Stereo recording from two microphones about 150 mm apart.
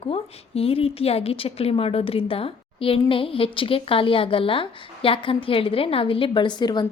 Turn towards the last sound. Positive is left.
turn(degrees=30)  # may be behind; listen again after turning